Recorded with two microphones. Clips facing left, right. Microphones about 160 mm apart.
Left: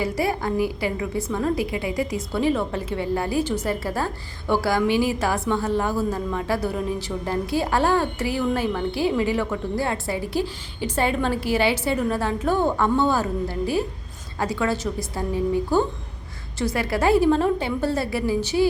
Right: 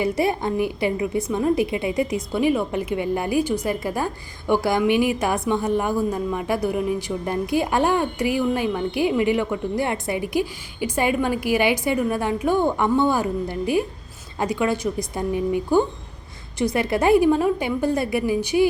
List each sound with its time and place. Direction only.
0.0 s a woman's voice: 20° right (ahead or behind)